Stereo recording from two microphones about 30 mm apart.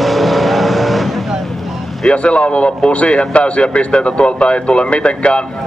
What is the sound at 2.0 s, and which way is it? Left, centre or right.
A man's voice, left.